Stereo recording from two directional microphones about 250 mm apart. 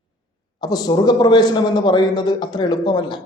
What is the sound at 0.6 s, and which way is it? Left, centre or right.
A man's voice, centre.